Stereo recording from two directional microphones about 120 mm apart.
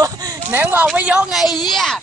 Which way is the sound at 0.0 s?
30° right (ahead or behind).